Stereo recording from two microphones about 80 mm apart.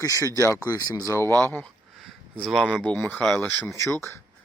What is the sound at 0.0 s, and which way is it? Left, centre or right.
Speech, left.